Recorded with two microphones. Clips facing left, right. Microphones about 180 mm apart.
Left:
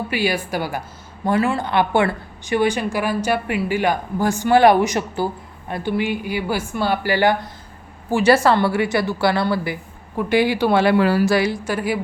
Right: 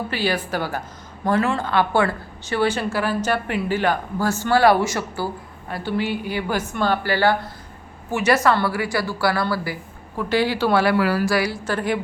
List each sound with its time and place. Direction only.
0.1 s speech: 10° left (ahead or behind)
8.1 s speech: 30° left (ahead or behind)
11.6 s speech: 10° left (ahead or behind)